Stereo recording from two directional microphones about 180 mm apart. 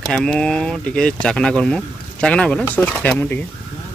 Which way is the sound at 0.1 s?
5° left (ahead or behind).